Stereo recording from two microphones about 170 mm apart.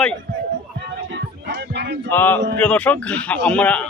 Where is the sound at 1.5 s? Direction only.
85° right.